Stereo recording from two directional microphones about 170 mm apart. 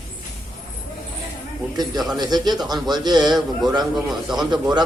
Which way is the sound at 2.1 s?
25° right (ahead or behind).